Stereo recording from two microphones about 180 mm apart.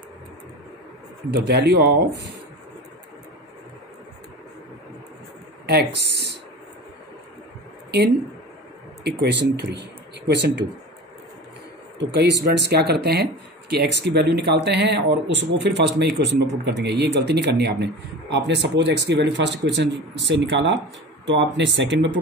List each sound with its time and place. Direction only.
1.3 s speech: 65° right (ahead or behind)
5.7 s speech: 65° right (ahead or behind)
9.0 s speech: 70° right (ahead or behind)
12.0 s speech: 70° right (ahead or behind)